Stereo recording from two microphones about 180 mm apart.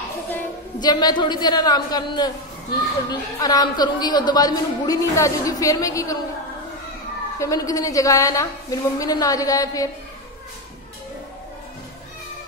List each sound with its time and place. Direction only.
0.3 s a woman's voice: 20° left (ahead or behind)
7.3 s a woman's voice: 20° left (ahead or behind)